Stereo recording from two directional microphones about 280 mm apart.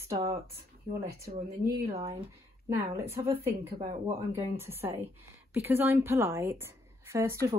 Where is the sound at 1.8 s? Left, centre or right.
Centre.